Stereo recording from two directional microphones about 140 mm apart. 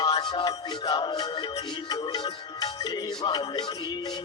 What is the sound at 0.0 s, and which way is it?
Music, 30° left (ahead or behind).